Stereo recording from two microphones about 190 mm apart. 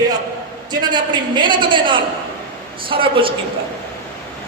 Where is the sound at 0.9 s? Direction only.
25° right (ahead or behind).